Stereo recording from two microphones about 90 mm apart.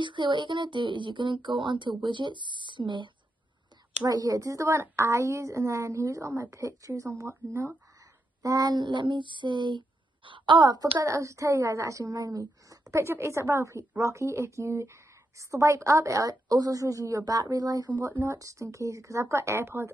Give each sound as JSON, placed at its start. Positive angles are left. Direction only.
{"t": 0.0, "sound": "speech", "side_deg": -60}
{"t": 4.0, "sound": "a woman's voice", "side_deg": -45}
{"t": 8.4, "sound": "a sound", "side_deg": -40}
{"t": 11.1, "sound": "a woman's voice", "side_deg": -35}
{"t": 18.2, "sound": "a woman's voice", "side_deg": -35}